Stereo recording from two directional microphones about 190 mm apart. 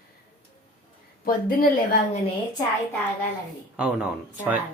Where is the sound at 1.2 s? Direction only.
50° left (ahead or behind).